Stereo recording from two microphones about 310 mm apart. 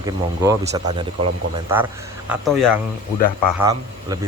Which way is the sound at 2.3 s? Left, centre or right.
Centre.